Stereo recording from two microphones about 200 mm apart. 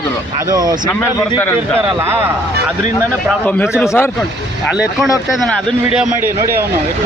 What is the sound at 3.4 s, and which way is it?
Speech, 10° left (ahead or behind).